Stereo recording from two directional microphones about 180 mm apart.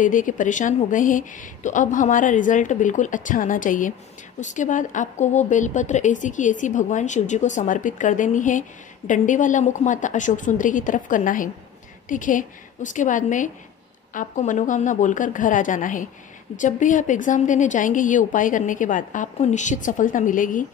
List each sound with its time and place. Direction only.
0.0 s a woman's voice: 45° left (ahead or behind)